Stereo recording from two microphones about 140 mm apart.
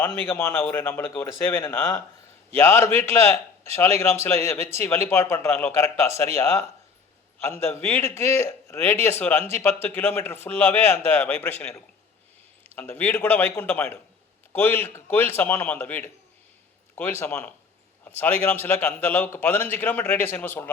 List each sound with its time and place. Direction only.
0.0 s speech: 15° left (ahead or behind)